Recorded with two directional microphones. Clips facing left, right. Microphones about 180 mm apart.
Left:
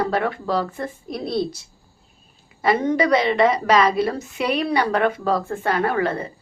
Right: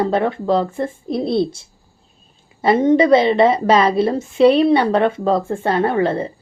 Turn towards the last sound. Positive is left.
turn(degrees=-30)  # may be behind; listen again after turning